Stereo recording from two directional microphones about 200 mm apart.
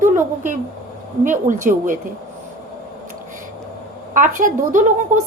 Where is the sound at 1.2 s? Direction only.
40° right (ahead or behind).